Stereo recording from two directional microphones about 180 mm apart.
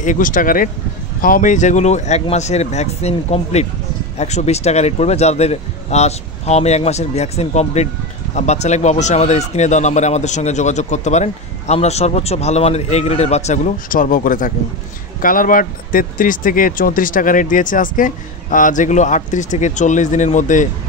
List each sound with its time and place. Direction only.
0.0 s speech: 45° left (ahead or behind)